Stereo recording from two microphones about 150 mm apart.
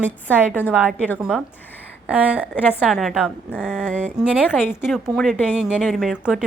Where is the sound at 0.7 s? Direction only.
10° right (ahead or behind).